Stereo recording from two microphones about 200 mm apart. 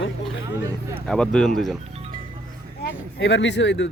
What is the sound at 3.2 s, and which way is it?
Speech, 65° left (ahead or behind).